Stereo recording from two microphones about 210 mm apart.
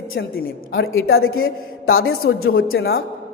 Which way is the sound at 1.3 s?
80° left.